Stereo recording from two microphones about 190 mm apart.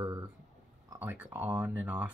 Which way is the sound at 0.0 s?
20° right (ahead or behind).